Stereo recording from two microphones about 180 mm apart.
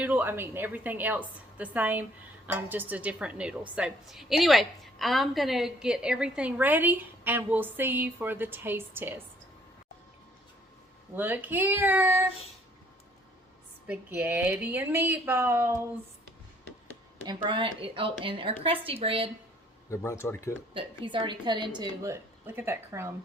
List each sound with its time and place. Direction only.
0.0 s a woman's voice: 10° right (ahead or behind)
11.1 s a woman's voice: 10° right (ahead or behind)
13.8 s a woman's voice: 10° right (ahead or behind)
17.2 s a woman's voice: 30° right (ahead or behind)
19.9 s speech: 15° left (ahead or behind)
20.7 s a woman's voice: 25° right (ahead or behind)